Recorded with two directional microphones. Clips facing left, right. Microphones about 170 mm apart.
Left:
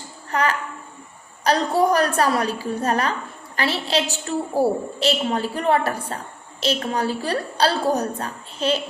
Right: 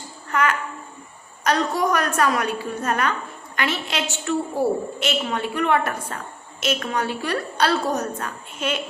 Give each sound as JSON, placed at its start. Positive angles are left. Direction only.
{"t": 0.3, "sound": "a child's voice", "side_deg": 35}